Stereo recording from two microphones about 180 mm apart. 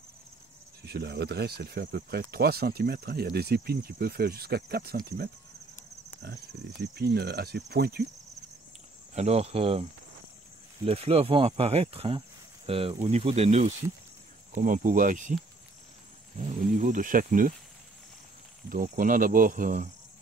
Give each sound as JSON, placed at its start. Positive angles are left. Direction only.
{"t": 0.8, "sound": "speech", "side_deg": -65}
{"t": 6.8, "sound": "speech", "side_deg": -65}
{"t": 9.1, "sound": "speech", "side_deg": -35}
{"t": 10.9, "sound": "speech", "side_deg": -35}
{"t": 16.3, "sound": "speech", "side_deg": -45}
{"t": 18.7, "sound": "speech", "side_deg": -50}